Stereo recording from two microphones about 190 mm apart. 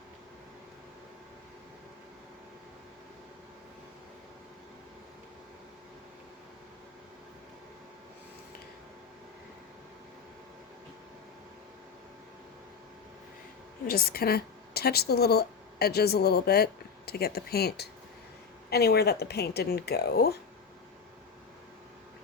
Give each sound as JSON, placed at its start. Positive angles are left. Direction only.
{"t": 13.8, "sound": "a woman's voice", "side_deg": 55}